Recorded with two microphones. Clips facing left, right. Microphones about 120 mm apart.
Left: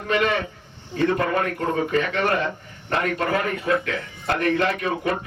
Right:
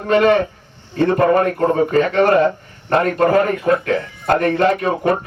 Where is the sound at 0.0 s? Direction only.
40° right (ahead or behind).